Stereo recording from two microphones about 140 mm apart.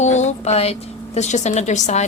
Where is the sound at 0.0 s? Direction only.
55° left (ahead or behind).